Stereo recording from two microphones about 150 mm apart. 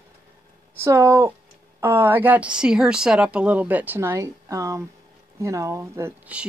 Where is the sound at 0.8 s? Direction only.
20° right (ahead or behind).